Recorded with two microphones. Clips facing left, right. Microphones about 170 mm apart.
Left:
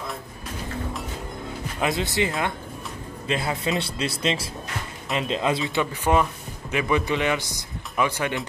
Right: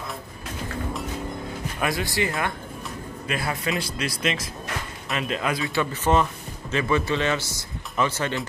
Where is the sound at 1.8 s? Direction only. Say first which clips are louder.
Left 2 dB; 20° left (ahead or behind).